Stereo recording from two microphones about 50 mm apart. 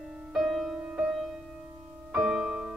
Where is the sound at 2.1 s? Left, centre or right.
Centre.